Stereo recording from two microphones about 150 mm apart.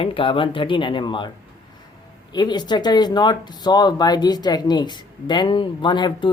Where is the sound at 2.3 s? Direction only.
30° left (ahead or behind).